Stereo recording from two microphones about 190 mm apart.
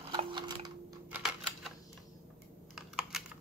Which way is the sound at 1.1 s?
Centre (ahead or behind).